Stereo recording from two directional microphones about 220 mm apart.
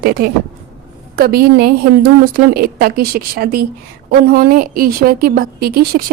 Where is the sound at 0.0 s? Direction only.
45° right (ahead or behind).